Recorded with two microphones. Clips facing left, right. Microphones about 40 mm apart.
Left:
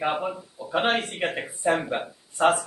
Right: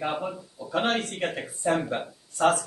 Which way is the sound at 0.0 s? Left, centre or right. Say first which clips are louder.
Left 3 dB; left.